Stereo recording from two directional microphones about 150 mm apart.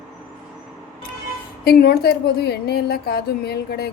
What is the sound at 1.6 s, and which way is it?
A woman's voice, 90° left.